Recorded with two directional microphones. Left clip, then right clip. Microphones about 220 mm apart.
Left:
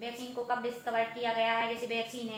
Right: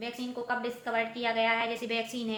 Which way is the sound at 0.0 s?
50° right (ahead or behind).